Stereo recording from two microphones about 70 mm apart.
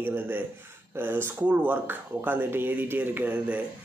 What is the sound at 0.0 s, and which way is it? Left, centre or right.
Speech, right.